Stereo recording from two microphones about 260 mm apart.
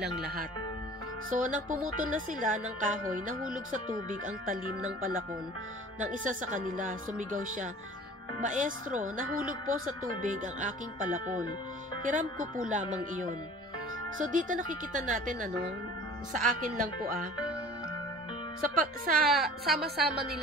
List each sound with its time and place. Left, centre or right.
1.3 s speech: right
14.1 s speech: right
18.6 s speech: right
19.3 s a woman's voice: centre
19.8 s speech: right